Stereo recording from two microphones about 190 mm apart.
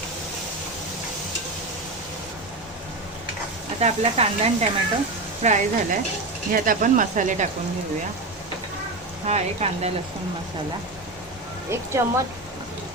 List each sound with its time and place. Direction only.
3.8 s speech: 35° right (ahead or behind)
9.2 s speech: 35° right (ahead or behind)
12.0 s speech: 15° right (ahead or behind)